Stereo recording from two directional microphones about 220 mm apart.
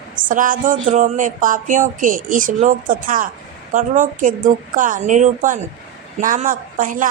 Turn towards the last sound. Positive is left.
turn(degrees=-35)  # may be behind; listen again after turning